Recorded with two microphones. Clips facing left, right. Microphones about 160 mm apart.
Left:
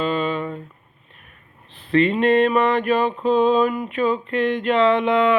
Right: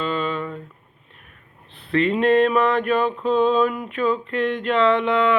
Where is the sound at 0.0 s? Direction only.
10° left (ahead or behind).